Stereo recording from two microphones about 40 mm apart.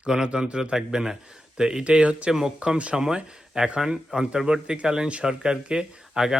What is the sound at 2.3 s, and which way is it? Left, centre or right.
Speech, centre.